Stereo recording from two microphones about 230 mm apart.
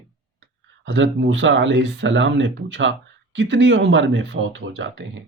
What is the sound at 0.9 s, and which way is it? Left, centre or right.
Speech, right.